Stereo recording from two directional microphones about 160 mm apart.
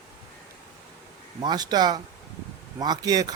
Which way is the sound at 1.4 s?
25° right (ahead or behind).